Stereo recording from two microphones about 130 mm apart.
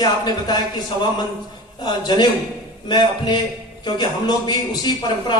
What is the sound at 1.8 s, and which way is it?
A man's voice, 35° left (ahead or behind).